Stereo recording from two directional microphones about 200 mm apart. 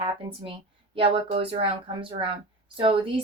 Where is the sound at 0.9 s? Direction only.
25° right (ahead or behind).